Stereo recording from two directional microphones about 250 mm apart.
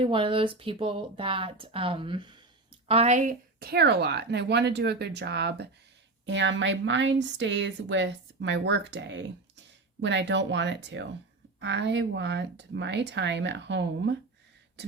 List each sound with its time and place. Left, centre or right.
0.0 s speech: centre; by 14.2 s right